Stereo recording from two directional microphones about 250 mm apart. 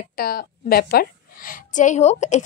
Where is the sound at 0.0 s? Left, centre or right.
Left.